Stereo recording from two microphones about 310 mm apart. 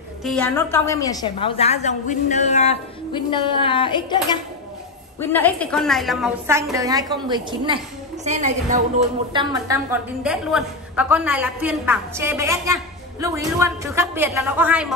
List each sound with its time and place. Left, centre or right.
0.2 s a woman's voice: centre
5.2 s a woman's voice: centre